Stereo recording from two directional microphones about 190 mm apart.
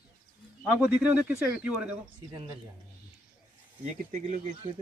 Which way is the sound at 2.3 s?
25° right (ahead or behind).